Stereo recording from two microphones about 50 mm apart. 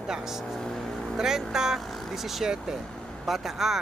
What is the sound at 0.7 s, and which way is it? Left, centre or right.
Vehicle, centre.